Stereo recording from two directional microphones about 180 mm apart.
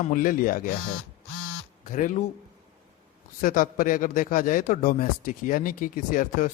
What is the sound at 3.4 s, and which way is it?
A man's voice, 50° left (ahead or behind).